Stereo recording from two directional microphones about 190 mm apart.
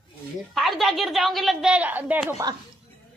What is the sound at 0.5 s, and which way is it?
A woman's voice, centre (ahead or behind).